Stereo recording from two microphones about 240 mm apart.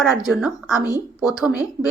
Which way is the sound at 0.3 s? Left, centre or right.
Centre.